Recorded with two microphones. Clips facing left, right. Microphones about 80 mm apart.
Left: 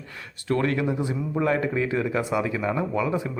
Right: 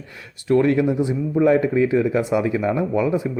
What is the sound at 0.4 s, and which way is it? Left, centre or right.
Speech, right.